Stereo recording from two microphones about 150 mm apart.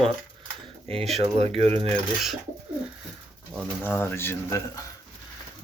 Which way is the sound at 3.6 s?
15° left (ahead or behind).